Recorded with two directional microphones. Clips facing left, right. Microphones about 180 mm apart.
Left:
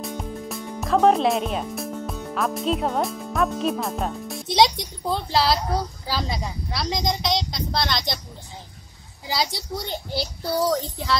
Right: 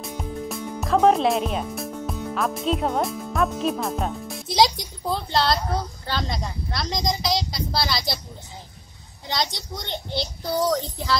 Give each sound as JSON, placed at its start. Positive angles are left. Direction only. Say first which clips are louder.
{"t": 0.0, "sound": "music", "louder": "even", "side_deg": 0}
{"t": 2.3, "sound": "speech", "louder": "left 1 dB", "side_deg": 0}
{"t": 9.3, "sound": "speech", "louder": "left 2 dB", "side_deg": 5}